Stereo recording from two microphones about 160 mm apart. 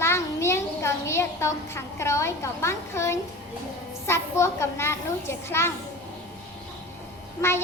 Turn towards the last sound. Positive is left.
turn(degrees=15)  # may be behind; listen again after turning